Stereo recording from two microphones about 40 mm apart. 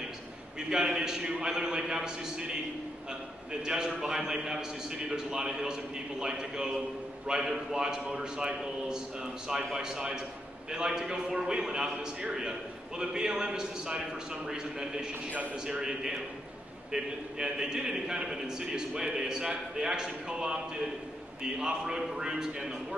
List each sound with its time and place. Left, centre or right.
0.6 s a man's voice: centre
3.6 s a man's voice: centre